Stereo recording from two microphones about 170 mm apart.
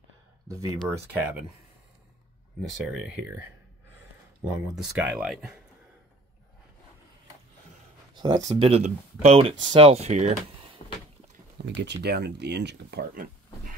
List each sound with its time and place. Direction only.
0.5 s speech: 20° right (ahead or behind)
2.7 s speech: 5° right (ahead or behind)
4.5 s speech: 5° right (ahead or behind)
8.1 s speech: 25° right (ahead or behind)
8.5 s speech: 35° right (ahead or behind)
11.6 s speech: 90° right; by 13.7 s 55° right (ahead or behind)